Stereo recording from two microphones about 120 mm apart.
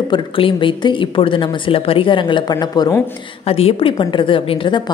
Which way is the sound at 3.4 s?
55° left (ahead or behind).